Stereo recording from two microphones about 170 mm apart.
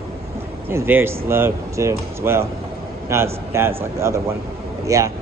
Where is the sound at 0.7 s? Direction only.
15° right (ahead or behind).